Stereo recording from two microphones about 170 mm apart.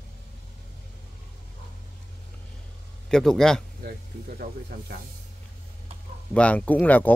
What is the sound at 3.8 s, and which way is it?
Speech, 60° right (ahead or behind).